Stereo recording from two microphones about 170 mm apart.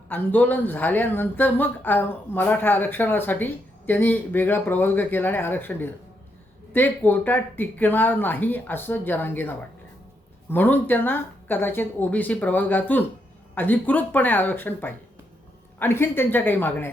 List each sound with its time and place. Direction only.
0.1 s speech: 10° left (ahead or behind)